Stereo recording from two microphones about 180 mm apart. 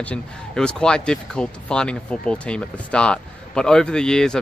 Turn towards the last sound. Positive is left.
turn(degrees=5)  # may be behind; listen again after turning